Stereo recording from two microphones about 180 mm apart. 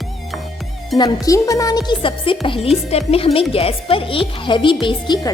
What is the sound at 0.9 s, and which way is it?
A woman's voice, 20° left (ahead or behind).